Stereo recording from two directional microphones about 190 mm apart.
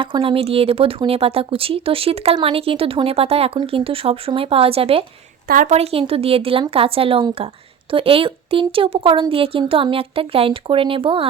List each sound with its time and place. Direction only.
0.0 s a woman's voice: 25° right (ahead or behind)
5.5 s a woman's voice: 40° right (ahead or behind)